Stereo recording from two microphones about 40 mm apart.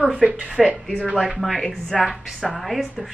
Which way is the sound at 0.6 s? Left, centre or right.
Centre.